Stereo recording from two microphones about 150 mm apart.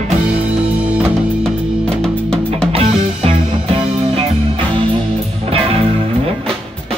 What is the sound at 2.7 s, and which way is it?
Music, 40° right (ahead or behind).